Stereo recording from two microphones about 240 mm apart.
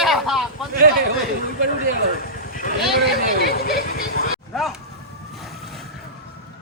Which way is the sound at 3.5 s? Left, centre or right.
Left.